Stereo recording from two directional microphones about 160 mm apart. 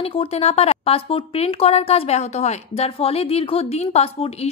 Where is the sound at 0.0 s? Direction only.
35° left (ahead or behind).